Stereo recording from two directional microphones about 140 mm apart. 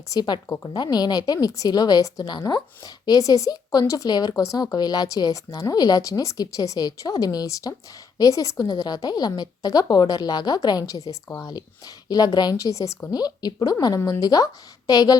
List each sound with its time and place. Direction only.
0.1 s a woman's voice: 30° left (ahead or behind)